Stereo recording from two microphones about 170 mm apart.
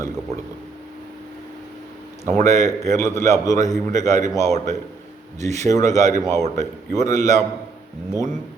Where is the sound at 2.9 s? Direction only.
15° left (ahead or behind).